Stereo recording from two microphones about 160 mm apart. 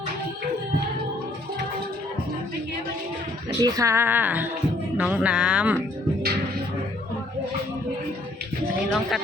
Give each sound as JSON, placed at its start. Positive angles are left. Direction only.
{"t": 3.6, "sound": "speech", "side_deg": -20}
{"t": 8.9, "sound": "speech", "side_deg": 0}